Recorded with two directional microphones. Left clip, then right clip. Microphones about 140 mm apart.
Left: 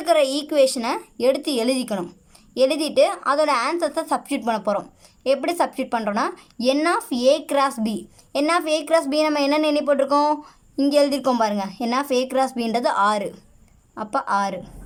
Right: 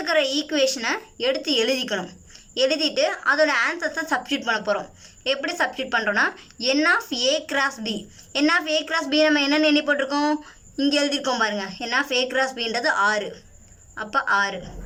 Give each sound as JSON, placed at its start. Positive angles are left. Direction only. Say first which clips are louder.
{"t": 0.0, "sound": "a woman's voice", "louder": "left 3 dB", "side_deg": 35}